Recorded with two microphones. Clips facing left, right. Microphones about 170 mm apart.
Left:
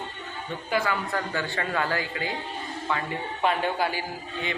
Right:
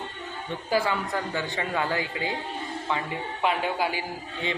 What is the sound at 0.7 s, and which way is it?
Speech, 30° right (ahead or behind).